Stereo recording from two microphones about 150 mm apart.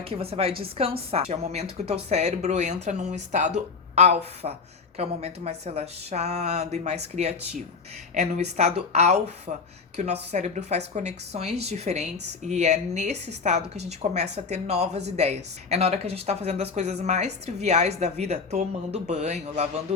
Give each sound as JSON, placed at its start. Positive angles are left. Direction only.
{"t": 0.0, "sound": "a woman's voice", "side_deg": -40}